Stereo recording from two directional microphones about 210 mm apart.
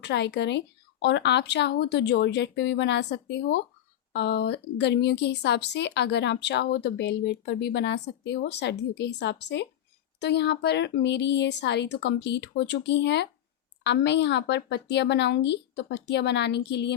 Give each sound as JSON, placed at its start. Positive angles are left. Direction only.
{"t": 0.0, "sound": "a woman's voice", "side_deg": 55}